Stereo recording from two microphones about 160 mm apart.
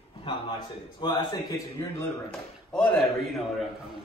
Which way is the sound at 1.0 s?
30° left (ahead or behind).